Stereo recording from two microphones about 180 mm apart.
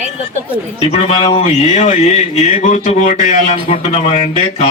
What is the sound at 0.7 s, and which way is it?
Speech, 35° left (ahead or behind).